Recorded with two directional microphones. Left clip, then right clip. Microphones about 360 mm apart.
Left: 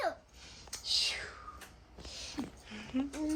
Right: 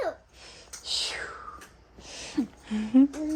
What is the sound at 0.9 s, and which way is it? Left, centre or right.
Whispering, right.